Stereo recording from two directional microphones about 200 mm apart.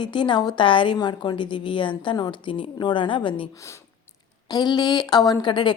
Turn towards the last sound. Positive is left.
turn(degrees=25)  # may be behind; listen again after turning